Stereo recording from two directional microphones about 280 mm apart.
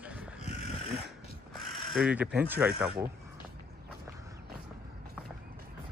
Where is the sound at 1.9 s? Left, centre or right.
Centre.